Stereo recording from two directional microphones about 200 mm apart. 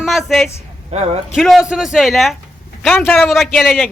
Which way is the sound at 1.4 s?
Centre (ahead or behind).